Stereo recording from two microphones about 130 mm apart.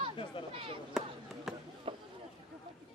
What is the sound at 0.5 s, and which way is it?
Chop, 45° right (ahead or behind).